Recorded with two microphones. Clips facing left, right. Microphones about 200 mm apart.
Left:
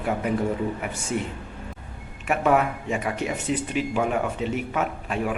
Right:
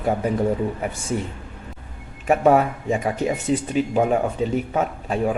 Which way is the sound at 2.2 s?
35° right (ahead or behind).